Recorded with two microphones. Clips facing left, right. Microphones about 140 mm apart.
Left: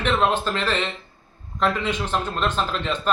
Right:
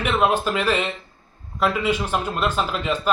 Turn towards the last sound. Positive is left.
turn(degrees=-10)  # may be behind; listen again after turning